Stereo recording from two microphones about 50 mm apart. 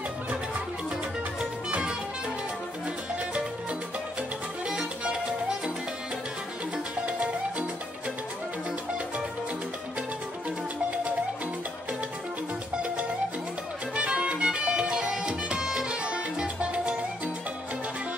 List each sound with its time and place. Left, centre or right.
4.6 s music: centre
7.1 s music: right
13.9 s music: right